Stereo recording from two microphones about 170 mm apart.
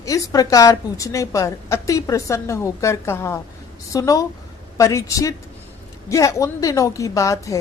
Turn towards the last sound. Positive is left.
turn(degrees=20)  # may be behind; listen again after turning